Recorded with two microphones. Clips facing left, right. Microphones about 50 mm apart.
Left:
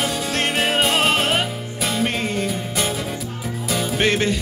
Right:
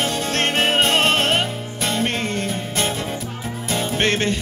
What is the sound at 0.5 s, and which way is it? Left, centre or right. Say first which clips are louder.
Music: right 2 dB; right.